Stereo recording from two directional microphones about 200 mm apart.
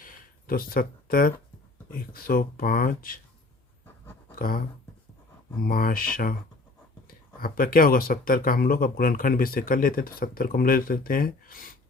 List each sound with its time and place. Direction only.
0.0 s a sound: 45° left (ahead or behind)
1.9 s speech: 45° left (ahead or behind)
4.4 s speech: 45° left (ahead or behind)
5.6 s speech: 45° left (ahead or behind)
7.3 s speech: 45° left (ahead or behind)